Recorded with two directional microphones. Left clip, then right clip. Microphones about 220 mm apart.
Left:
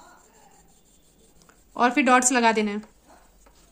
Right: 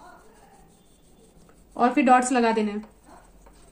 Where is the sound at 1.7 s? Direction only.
40° left (ahead or behind).